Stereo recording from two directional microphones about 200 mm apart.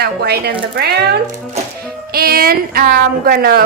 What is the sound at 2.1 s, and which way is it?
Speech, 50° right (ahead or behind).